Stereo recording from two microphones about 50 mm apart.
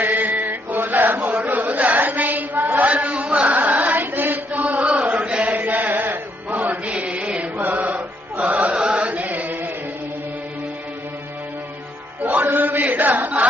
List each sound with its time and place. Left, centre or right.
0.0 s mantra: right
1.5 s chant: right
5.9 s music: right
8.8 s chant: right
12.2 s chant: right